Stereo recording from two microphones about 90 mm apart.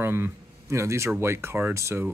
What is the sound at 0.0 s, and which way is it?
Speech, 25° right (ahead or behind).